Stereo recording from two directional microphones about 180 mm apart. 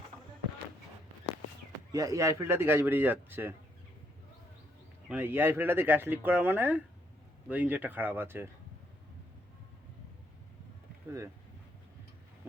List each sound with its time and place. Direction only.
1.9 s speech: 20° right (ahead or behind)
5.0 s speech: 10° right (ahead or behind)